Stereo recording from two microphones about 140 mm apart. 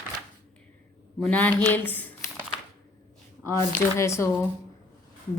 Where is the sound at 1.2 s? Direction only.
10° left (ahead or behind).